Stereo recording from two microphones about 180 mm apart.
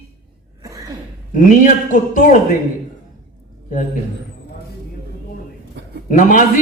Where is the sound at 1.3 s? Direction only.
45° left (ahead or behind).